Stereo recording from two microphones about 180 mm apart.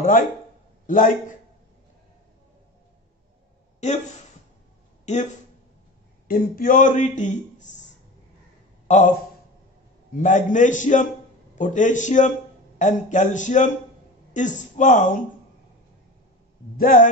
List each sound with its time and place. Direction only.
0.0 s a man's voice: 50° left (ahead or behind)
5.1 s speech: 40° left (ahead or behind)
6.2 s a man's voice: 50° left (ahead or behind)
8.8 s a man's voice: 40° left (ahead or behind)
10.1 s a man's voice: 45° left (ahead or behind)
16.7 s a man's voice: 45° left (ahead or behind)